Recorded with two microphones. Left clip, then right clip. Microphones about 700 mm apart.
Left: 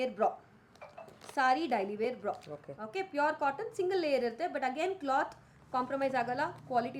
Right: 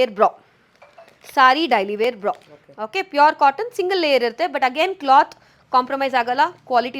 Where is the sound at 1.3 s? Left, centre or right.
Right.